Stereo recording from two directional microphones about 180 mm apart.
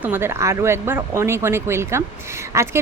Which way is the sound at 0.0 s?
10° right (ahead or behind).